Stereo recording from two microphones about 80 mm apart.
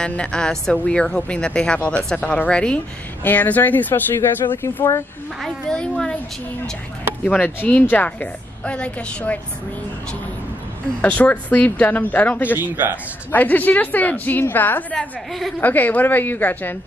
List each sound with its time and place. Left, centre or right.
0.0 s a woman's voice: centre; by 5.0 s left
5.4 s speech: centre
7.4 s a woman's voice: left
11.0 s a woman's voice: centre
12.5 s speech: right
13.3 s a woman's voice: left